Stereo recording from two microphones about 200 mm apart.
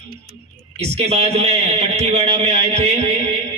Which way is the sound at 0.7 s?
30° right (ahead or behind).